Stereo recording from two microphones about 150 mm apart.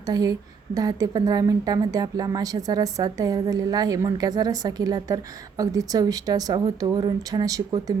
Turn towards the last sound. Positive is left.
turn(degrees=-25)  # may be behind; listen again after turning